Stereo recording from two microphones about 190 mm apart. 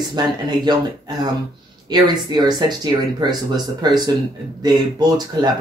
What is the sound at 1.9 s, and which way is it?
Speech, 20° right (ahead or behind).